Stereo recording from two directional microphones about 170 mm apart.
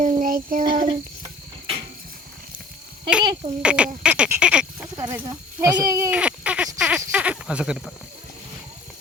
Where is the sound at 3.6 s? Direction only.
5° right (ahead or behind).